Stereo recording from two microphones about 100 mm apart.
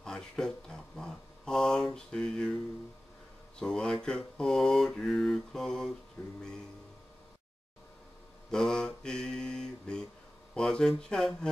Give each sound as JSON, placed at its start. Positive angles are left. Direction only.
{"t": 0.0, "sound": "speech", "side_deg": 5}
{"t": 3.5, "sound": "mantra", "side_deg": 5}
{"t": 8.5, "sound": "speech", "side_deg": 5}
{"t": 10.5, "sound": "mantra", "side_deg": 5}